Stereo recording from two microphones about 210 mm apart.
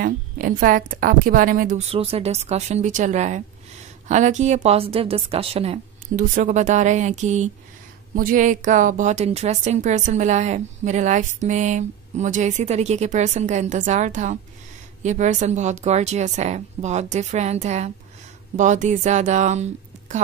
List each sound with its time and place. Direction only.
0.0 s a woman's voice: 40° right (ahead or behind)